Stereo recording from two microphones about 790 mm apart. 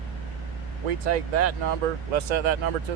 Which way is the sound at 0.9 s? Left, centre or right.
Right.